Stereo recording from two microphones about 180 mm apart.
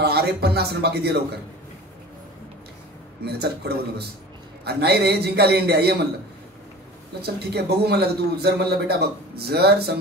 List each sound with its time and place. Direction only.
0.0 s a man's voice: 65° right (ahead or behind)
3.3 s a man's voice: 65° right (ahead or behind)
7.2 s a man's voice: 65° right (ahead or behind)